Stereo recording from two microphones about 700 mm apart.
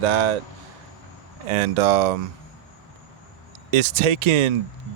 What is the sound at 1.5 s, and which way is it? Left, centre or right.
Speech, right.